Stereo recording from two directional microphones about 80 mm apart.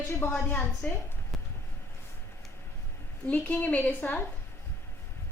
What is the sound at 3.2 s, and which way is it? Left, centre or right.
A woman's voice, centre.